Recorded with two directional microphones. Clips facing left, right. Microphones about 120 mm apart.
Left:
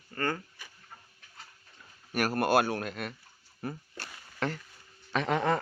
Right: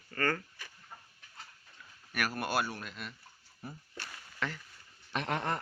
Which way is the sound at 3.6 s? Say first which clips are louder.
Left 9 dB; 75° left (ahead or behind).